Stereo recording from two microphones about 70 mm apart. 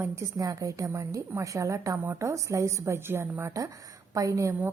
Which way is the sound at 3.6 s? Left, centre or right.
Right.